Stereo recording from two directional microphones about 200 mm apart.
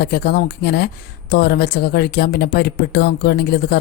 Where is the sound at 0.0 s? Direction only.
55° left (ahead or behind).